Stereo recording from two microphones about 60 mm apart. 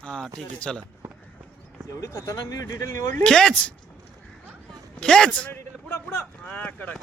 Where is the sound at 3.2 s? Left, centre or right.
Centre.